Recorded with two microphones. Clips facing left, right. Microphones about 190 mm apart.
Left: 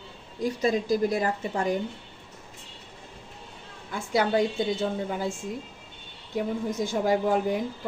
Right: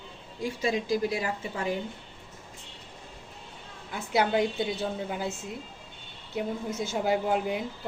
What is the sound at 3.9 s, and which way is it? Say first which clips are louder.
A woman's voice: left 2 dB; 50° left (ahead or behind).